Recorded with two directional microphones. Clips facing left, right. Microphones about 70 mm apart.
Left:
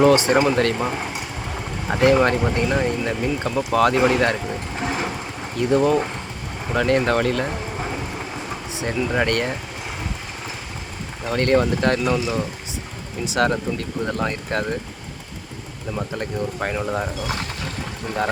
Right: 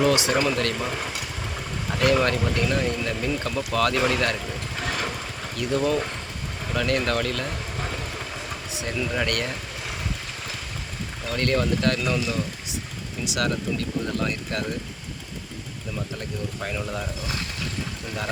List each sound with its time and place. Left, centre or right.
0.0 s speech: left
4.8 s vehicle: left
5.5 s speech: left
11.3 s speech: left
16.0 s speech: left